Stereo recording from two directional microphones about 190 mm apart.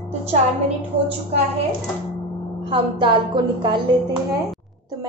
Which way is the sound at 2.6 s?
25° right (ahead or behind).